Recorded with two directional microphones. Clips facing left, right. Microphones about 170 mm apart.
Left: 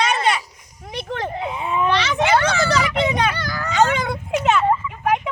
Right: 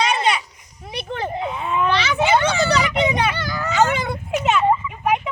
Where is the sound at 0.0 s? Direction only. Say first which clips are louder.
Even; 10° right (ahead or behind).